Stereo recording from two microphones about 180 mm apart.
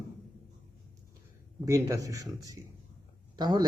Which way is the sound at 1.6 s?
20° right (ahead or behind).